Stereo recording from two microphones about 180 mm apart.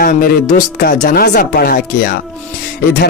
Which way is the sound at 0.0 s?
50° left (ahead or behind).